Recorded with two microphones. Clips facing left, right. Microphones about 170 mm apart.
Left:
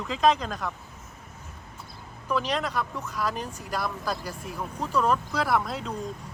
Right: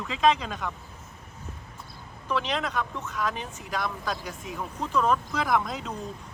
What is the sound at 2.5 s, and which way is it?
Speech, 5° left (ahead or behind).